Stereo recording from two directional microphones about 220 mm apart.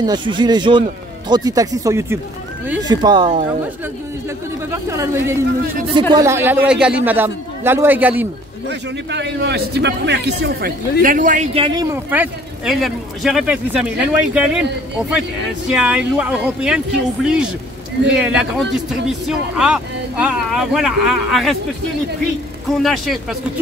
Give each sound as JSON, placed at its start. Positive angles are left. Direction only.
{"t": 0.0, "sound": "a man's voice", "side_deg": -20}
{"t": 4.6, "sound": "a man's voice", "side_deg": -15}
{"t": 8.6, "sound": "a man's voice", "side_deg": -50}
{"t": 15.7, "sound": "speech", "side_deg": -5}
{"t": 22.7, "sound": "speech", "side_deg": 0}